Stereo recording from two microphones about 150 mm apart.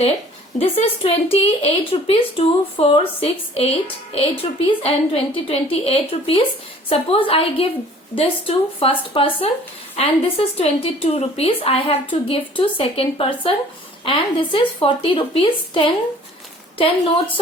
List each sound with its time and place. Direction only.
0.6 s speech: 40° left (ahead or behind)